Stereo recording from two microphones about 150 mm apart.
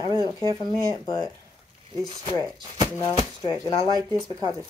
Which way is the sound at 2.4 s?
25° right (ahead or behind).